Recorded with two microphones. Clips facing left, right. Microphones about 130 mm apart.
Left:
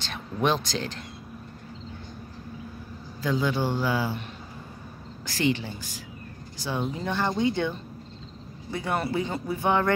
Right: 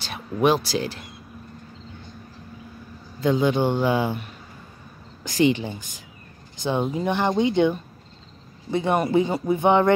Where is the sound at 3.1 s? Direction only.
20° right (ahead or behind).